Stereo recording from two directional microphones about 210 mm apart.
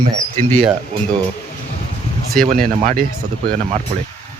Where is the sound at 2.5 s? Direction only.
40° right (ahead or behind).